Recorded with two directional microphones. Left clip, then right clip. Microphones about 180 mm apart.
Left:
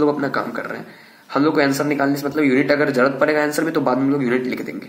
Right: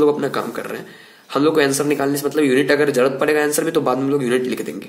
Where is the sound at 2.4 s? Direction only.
70° right (ahead or behind).